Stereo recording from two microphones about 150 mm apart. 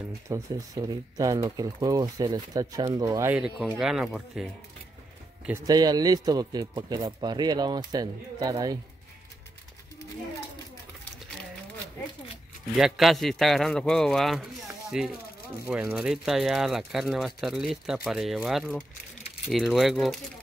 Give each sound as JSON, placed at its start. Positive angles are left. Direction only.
{"t": 0.3, "sound": "speech", "side_deg": -25}
{"t": 3.3, "sound": "speech", "side_deg": -5}
{"t": 5.7, "sound": "speech", "side_deg": -25}
{"t": 12.7, "sound": "speech", "side_deg": 0}